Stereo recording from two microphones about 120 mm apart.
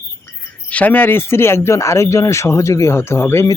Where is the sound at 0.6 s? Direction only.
10° left (ahead or behind).